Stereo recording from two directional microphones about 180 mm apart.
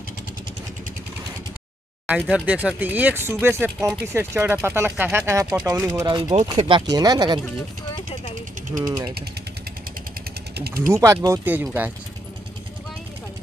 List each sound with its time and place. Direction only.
2.0 s speech: 5° right (ahead or behind); by 7.3 s 20° right (ahead or behind)
8.8 s speech: 25° right (ahead or behind)
10.5 s speech: 60° right (ahead or behind)
10.9 s speech: 15° right (ahead or behind)